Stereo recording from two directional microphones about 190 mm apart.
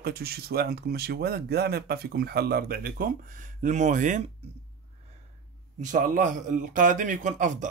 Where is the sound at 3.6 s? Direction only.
40° right (ahead or behind).